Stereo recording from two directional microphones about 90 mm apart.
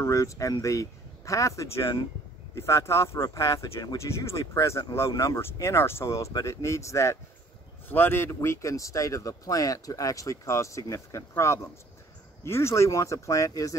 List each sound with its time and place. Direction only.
0.0 s speech: 35° left (ahead or behind)